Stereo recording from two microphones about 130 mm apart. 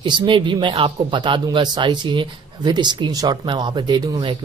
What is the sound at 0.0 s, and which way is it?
Speech, 35° right (ahead or behind).